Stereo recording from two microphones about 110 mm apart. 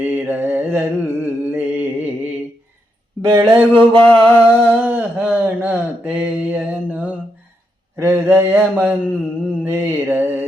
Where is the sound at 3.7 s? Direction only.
50° right (ahead or behind).